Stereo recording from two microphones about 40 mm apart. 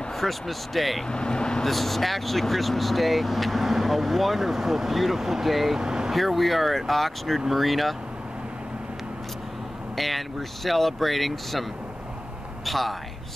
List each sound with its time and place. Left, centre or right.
0.2 s speech: centre
1.0 s speech: centre
1.6 s speech: centre
5.8 s vehicle: centre
6.1 s speech: centre
9.9 s speech: centre
12.6 s speech: centre